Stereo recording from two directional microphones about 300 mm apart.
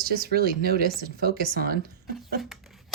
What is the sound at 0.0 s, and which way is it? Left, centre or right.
Speech, right.